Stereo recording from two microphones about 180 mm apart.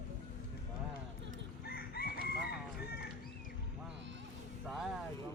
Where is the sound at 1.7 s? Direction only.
55° left (ahead or behind).